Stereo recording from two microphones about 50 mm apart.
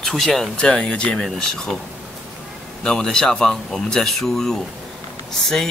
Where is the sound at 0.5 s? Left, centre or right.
Left.